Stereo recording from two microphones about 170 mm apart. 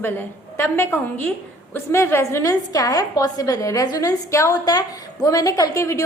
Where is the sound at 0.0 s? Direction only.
10° left (ahead or behind).